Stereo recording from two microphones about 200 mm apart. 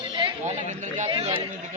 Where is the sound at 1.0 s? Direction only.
25° right (ahead or behind).